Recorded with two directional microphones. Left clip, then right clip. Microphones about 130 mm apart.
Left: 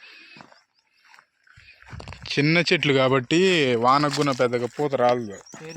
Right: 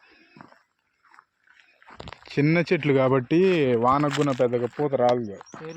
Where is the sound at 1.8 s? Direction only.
70° left (ahead or behind).